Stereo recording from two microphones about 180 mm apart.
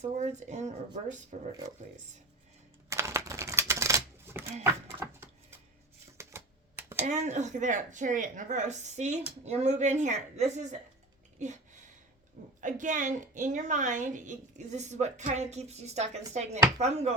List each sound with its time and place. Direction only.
0.0 s speech: 40° right (ahead or behind)
2.9 s a sound: 15° right (ahead or behind)
6.1 s typewriter: 15° right (ahead or behind)
7.0 s speech: 40° right (ahead or behind)
11.3 s a sound: 40° right (ahead or behind)
12.5 s a woman's voice: 45° right (ahead or behind)